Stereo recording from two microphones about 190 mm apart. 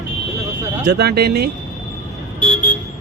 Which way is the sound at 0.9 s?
60° right (ahead or behind).